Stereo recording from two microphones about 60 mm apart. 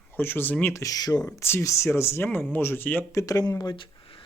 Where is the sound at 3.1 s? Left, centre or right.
Left.